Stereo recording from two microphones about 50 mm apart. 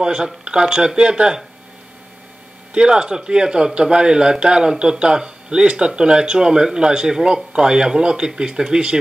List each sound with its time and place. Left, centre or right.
0.0 s speech: centre
2.7 s speech: centre